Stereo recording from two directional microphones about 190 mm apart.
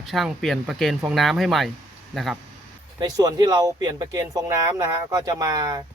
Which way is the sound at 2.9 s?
20° right (ahead or behind).